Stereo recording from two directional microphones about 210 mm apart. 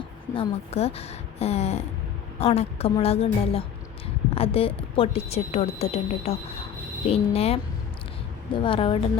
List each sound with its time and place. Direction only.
0.3 s a woman's voice: 30° left (ahead or behind)